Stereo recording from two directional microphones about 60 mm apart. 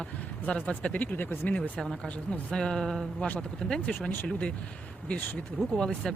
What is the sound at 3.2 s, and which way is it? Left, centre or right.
Speech, left.